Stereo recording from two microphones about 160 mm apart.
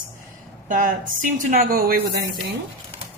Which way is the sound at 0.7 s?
55° right (ahead or behind).